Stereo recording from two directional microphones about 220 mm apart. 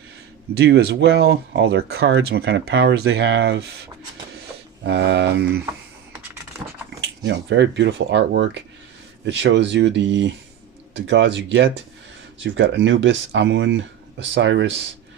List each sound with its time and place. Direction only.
0.5 s speech: 50° right (ahead or behind)
4.9 s speech: 50° right (ahead or behind)
7.0 s speech: 55° right (ahead or behind)